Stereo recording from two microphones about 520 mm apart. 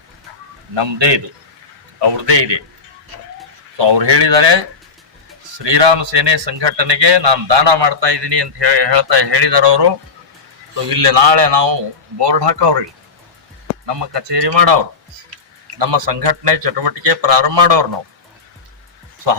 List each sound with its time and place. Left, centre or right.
0.7 s a man's voice: right
3.8 s speech: right
5.6 s speech: right
11.1 s speech: right
13.8 s speech: right
15.8 s speech: right